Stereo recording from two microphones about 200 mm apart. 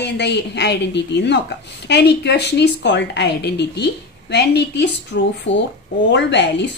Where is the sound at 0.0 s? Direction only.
55° left (ahead or behind).